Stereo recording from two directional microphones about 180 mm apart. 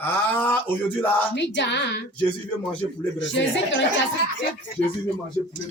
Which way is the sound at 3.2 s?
90° left.